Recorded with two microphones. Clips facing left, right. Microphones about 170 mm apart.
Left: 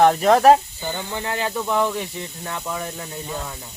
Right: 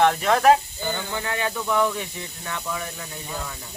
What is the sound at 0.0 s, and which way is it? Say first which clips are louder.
Speech: left 4 dB; 35° left (ahead or behind).